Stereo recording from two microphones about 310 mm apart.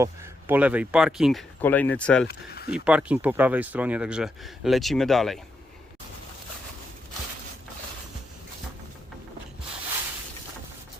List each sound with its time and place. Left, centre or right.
0.0 s speech: centre
2.2 s speech: left
2.7 s speech: centre